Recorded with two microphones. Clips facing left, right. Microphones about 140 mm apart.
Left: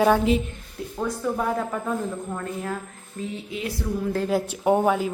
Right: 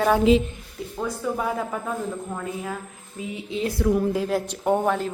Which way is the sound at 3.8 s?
65° right (ahead or behind).